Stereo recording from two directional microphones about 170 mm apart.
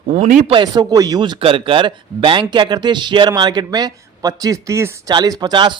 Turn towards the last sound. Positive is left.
turn(degrees=-25)  # may be behind; listen again after turning